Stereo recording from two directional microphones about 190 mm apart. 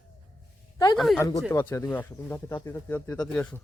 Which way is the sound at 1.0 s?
Centre (ahead or behind).